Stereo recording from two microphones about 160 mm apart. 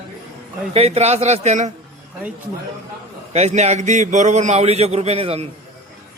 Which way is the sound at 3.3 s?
45° right (ahead or behind).